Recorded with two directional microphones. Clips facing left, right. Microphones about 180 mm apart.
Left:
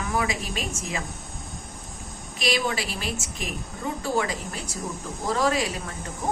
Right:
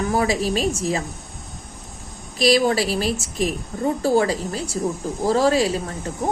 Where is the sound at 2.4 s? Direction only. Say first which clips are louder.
Right 9 dB; 40° right (ahead or behind).